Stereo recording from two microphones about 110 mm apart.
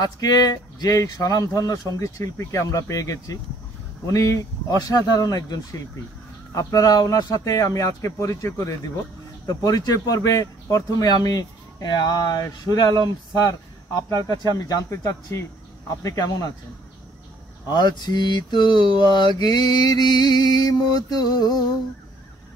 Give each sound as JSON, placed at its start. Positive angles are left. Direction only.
{"t": 0.0, "sound": "mantra", "side_deg": 35}
{"t": 13.5, "sound": "speech", "side_deg": 30}
{"t": 14.4, "sound": "mantra", "side_deg": 35}
{"t": 16.0, "sound": "speech", "side_deg": 30}
{"t": 17.6, "sound": "mantra", "side_deg": 40}